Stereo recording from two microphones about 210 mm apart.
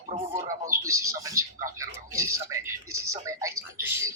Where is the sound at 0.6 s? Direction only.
15° right (ahead or behind).